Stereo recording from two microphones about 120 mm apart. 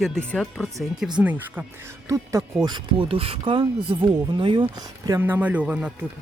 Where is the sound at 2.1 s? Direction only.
25° right (ahead or behind).